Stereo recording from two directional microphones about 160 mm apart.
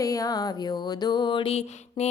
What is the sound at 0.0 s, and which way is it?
Music, 20° left (ahead or behind).